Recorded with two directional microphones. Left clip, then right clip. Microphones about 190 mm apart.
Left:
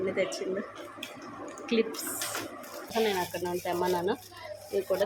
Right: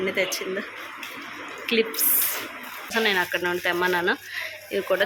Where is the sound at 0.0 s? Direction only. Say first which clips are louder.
Right 5 dB; centre (ahead or behind).